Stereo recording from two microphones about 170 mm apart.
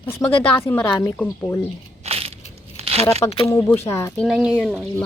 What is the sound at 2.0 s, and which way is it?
Crushing, 35° right (ahead or behind).